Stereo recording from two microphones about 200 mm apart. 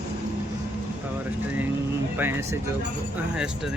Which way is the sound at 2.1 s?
10° right (ahead or behind).